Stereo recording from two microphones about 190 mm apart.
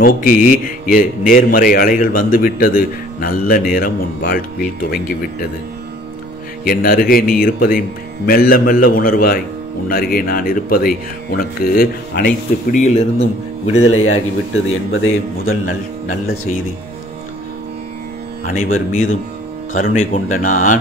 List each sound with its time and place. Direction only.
0.0 s speech: 50° left (ahead or behind)
6.6 s speech: 50° left (ahead or behind)
12.7 s speech: 35° left (ahead or behind)
13.8 s speech: 90° left
18.9 s speech: 40° left (ahead or behind)